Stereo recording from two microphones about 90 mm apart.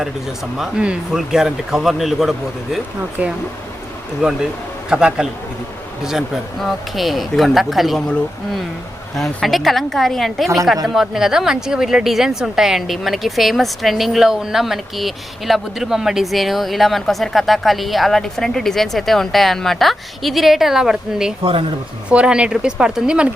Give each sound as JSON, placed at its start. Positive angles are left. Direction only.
{"t": 0.5, "sound": "speech", "side_deg": -10}
{"t": 3.2, "sound": "speech", "side_deg": -15}
{"t": 9.1, "sound": "speech", "side_deg": 0}